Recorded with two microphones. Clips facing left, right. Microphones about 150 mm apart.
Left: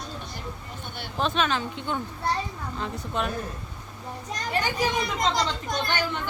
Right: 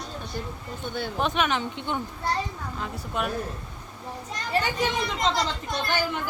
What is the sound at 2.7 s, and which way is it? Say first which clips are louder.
Speech: left 1 dB; 5° right (ahead or behind).